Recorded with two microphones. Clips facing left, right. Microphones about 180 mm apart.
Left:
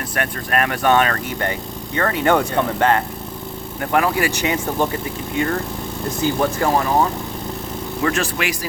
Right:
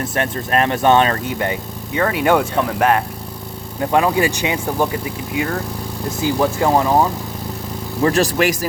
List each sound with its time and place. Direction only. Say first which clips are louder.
0.2 s speech: right 2 dB; 25° right (ahead or behind); by 3.0 s 10° right (ahead or behind)
3.8 s speech: right 3 dB; 20° right (ahead or behind)
6.2 s speech: right 2 dB; 15° right (ahead or behind)
8.0 s speech: right 6 dB; 35° right (ahead or behind)